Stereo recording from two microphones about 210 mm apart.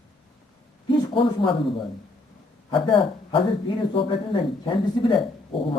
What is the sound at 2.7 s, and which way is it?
Speech, 25° left (ahead or behind).